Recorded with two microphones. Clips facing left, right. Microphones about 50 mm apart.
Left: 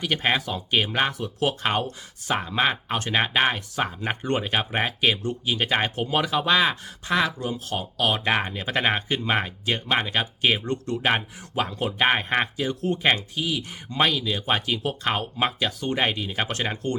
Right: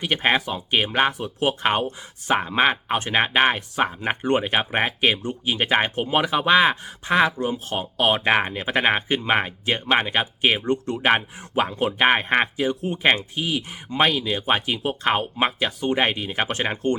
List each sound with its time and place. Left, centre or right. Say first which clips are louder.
0.0 s speech: right 3 dB; right